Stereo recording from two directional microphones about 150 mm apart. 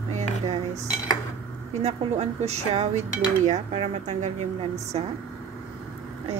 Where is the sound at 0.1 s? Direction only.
50° right (ahead or behind).